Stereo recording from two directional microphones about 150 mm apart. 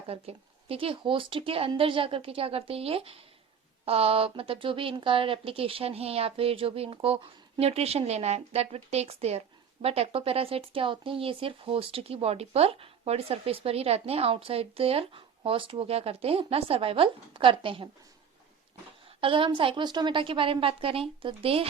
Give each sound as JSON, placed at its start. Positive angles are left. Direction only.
{"t": 0.1, "sound": "speech", "side_deg": -40}
{"t": 19.2, "sound": "speech", "side_deg": -35}